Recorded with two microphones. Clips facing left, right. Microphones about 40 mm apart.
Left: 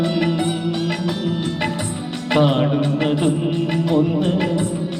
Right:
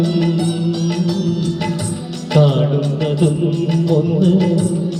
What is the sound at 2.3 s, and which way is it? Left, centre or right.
Music, left.